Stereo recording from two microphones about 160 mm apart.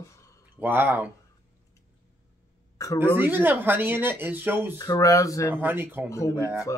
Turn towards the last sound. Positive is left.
turn(degrees=-10)  # may be behind; listen again after turning